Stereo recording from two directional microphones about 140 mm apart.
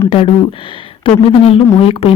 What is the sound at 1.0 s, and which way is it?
Speech, 45° left (ahead or behind).